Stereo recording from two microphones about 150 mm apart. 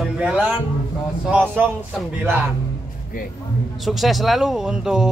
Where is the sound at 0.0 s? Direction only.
5° right (ahead or behind).